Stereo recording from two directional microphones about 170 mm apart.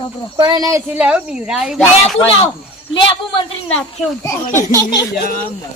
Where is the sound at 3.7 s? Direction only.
15° left (ahead or behind).